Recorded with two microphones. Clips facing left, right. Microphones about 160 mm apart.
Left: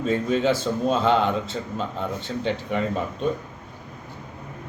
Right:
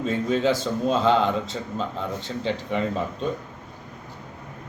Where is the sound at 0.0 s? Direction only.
Centre (ahead or behind).